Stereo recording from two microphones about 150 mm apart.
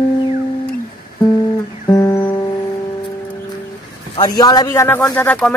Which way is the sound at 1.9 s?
20° left (ahead or behind).